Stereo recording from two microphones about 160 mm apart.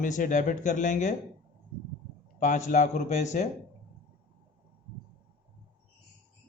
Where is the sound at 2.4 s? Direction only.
50° left (ahead or behind).